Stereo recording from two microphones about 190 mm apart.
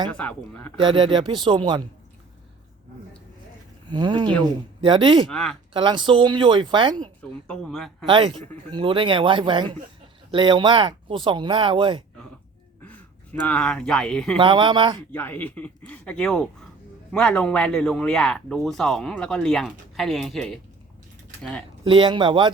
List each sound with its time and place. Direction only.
0.1 s speech: 5° left (ahead or behind)
0.8 s speech: 25° right (ahead or behind)
3.8 s speech: 25° right (ahead or behind)
5.3 s a man's voice: centre (ahead or behind)
5.7 s speech: 25° right (ahead or behind)
7.2 s a man's voice: 5° left (ahead or behind)
8.0 s speech: 25° right (ahead or behind)
13.5 s a man's voice: 5° left (ahead or behind)
14.3 s speech: 25° right (ahead or behind)
15.1 s a man's voice: 10° left (ahead or behind)
21.8 s speech: 25° right (ahead or behind)